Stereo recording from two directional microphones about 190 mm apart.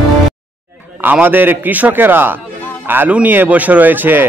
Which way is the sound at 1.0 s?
10° right (ahead or behind).